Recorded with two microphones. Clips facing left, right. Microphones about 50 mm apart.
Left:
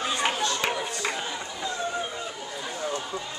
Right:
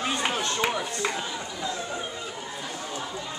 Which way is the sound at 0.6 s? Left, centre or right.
Centre.